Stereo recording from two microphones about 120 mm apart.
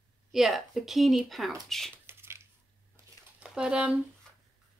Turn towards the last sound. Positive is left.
turn(degrees=-10)  # may be behind; listen again after turning